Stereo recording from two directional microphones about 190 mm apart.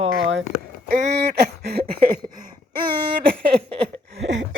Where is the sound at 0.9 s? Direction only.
45° right (ahead or behind).